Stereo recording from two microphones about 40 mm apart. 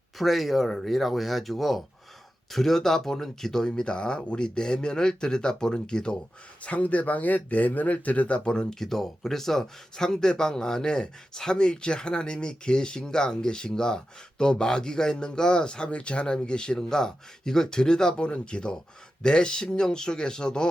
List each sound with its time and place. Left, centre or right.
0.2 s speech: centre
6.6 s speech: left
8.4 s speech: left
8.8 s speech: centre